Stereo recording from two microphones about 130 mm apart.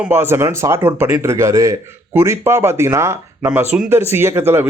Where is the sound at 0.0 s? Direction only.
15° right (ahead or behind).